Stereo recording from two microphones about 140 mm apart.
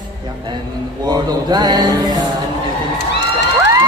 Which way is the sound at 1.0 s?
30° right (ahead or behind).